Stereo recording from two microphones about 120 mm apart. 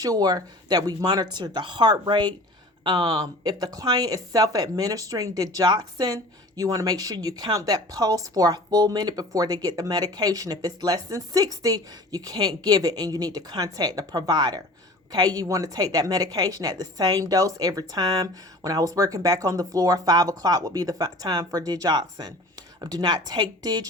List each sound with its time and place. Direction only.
0.0 s speech: 30° right (ahead or behind)